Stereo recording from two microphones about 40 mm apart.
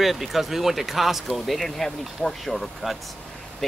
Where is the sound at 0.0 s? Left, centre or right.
Centre.